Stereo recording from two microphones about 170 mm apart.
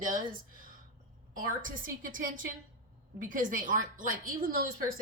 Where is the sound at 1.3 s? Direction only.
55° right (ahead or behind).